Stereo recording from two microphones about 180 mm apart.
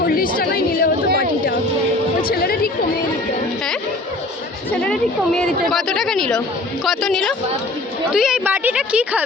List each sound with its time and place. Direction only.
0.0 s a sound: 55° left (ahead or behind)
2.2 s chatter: 55° left (ahead or behind)
4.8 s a woman's voice: 5° left (ahead or behind)